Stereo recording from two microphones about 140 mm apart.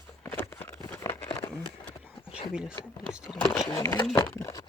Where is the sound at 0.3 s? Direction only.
15° left (ahead or behind).